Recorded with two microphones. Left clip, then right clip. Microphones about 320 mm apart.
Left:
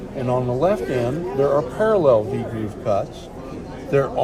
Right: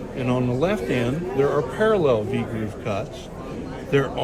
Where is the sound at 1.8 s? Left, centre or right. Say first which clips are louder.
Left 3 dB; centre.